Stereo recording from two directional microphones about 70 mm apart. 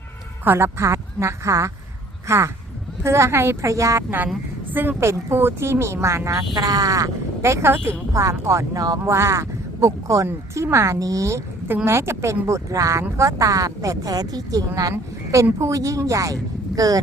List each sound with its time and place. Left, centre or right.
0.4 s speech: right
4.7 s a woman's voice: right
4.9 s speech: right
6.5 s speech: right
14.8 s speech: right